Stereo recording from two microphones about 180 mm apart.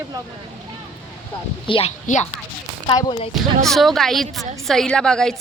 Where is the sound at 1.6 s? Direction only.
30° left (ahead or behind).